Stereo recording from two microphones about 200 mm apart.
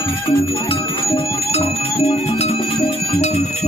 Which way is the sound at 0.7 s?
30° left (ahead or behind).